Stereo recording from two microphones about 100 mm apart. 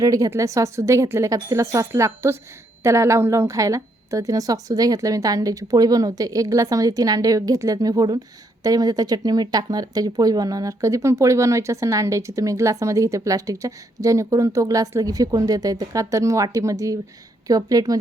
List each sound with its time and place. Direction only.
0.0 s speech: 35° right (ahead or behind)